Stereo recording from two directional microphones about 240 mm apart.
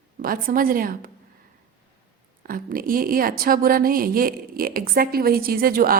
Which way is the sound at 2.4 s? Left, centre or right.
Right.